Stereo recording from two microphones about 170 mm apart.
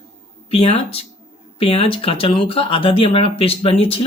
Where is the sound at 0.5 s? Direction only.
35° left (ahead or behind).